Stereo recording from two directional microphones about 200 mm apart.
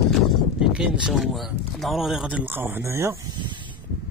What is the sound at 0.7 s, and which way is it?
Speech, centre (ahead or behind).